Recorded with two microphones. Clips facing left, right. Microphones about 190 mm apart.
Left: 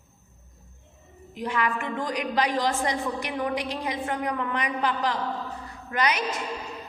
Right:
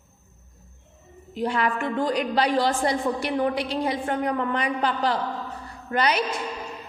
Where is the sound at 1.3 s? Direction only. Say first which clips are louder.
Right 3 dB; 35° right (ahead or behind).